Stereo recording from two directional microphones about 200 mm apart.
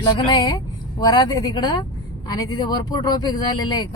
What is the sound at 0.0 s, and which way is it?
A woman's voice, 20° left (ahead or behind).